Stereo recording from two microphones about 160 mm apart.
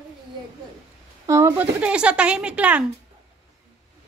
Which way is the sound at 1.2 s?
20° right (ahead or behind).